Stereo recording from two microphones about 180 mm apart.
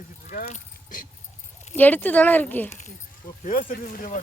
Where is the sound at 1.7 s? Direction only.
10° left (ahead or behind).